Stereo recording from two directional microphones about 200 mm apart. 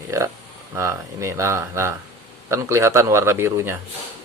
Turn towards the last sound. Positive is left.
turn(degrees=-15)  # may be behind; listen again after turning